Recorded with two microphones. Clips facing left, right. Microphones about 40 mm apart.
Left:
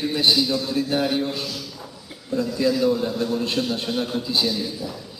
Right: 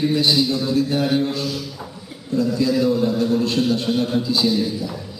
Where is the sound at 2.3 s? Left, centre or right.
Centre.